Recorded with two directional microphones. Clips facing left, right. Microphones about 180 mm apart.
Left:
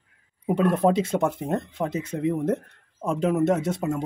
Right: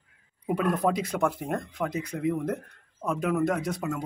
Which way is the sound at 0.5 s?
25° left (ahead or behind).